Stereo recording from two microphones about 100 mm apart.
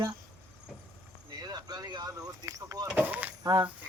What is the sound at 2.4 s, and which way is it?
Power windows, 35° right (ahead or behind).